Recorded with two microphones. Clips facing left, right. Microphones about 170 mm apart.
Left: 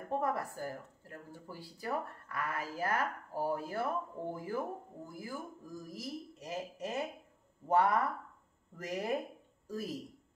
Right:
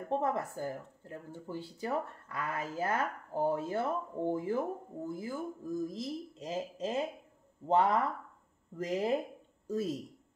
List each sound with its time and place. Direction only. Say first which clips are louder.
0.1 s speech: right 2 dB; 20° right (ahead or behind)